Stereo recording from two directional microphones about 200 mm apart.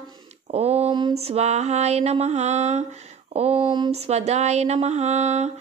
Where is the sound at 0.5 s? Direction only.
30° right (ahead or behind).